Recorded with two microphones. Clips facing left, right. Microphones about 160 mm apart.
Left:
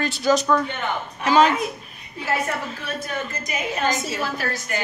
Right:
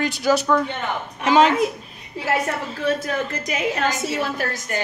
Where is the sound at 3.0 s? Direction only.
85° right.